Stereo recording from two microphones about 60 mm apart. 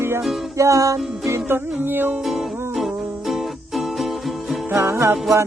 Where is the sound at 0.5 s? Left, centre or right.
Right.